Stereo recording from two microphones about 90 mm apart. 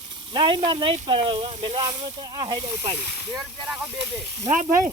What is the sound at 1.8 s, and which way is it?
Speech, 55° right (ahead or behind).